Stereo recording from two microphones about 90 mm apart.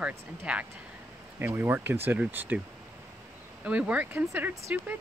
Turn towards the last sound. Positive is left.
turn(degrees=-15)  # may be behind; listen again after turning